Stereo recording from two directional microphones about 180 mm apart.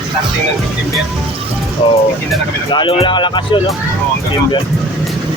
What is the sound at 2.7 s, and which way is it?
Speech, 30° left (ahead or behind).